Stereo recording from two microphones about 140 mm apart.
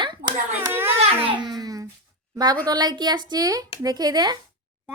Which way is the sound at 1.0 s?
45° right (ahead or behind).